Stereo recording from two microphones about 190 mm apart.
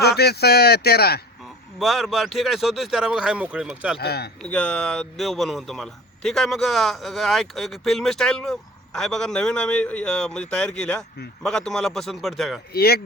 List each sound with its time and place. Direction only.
0.0 s speech: 60° left (ahead or behind)
1.8 s a man's voice: centre (ahead or behind)
3.9 s speech: 60° left (ahead or behind)
4.4 s a man's voice: 5° left (ahead or behind)
12.7 s speech: 55° left (ahead or behind)